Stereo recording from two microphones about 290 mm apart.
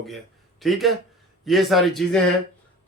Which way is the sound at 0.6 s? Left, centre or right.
Centre.